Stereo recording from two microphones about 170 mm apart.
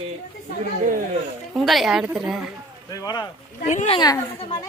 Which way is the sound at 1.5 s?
Centre (ahead or behind).